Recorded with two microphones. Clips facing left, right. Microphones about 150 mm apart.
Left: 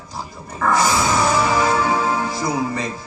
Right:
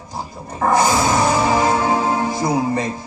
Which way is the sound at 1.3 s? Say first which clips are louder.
Right 2 dB; 25° right (ahead or behind).